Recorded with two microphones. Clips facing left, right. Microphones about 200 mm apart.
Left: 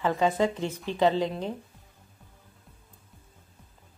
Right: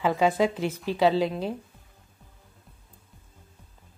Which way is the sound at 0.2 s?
10° right (ahead or behind).